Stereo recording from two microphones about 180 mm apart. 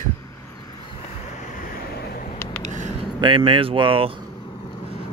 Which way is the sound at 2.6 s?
40° right (ahead or behind).